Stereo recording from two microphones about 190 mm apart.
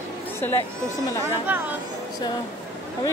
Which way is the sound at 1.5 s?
10° right (ahead or behind).